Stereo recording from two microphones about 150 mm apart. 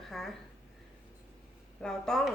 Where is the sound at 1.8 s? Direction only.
5° left (ahead or behind).